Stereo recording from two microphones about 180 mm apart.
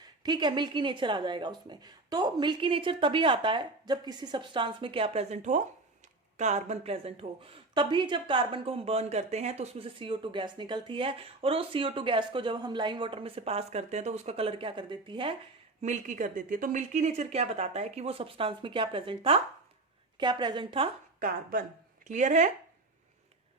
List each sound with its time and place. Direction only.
0.0 s speech: 25° right (ahead or behind)
15.8 s speech: 45° right (ahead or behind)
21.2 s speech: 50° right (ahead or behind)